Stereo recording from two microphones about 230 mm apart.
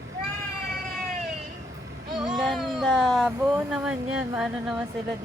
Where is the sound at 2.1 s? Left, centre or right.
Centre.